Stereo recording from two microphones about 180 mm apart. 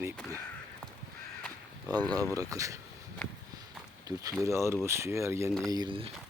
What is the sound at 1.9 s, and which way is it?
Speech, 20° right (ahead or behind).